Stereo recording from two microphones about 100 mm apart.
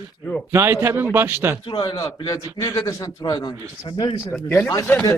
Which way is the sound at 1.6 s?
50° left (ahead or behind).